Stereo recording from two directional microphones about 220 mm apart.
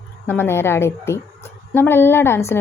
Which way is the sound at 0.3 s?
10° left (ahead or behind).